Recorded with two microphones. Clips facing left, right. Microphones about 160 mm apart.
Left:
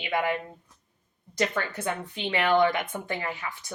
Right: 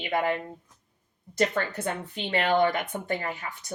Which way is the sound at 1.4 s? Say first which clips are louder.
Right 2 dB; 50° right (ahead or behind).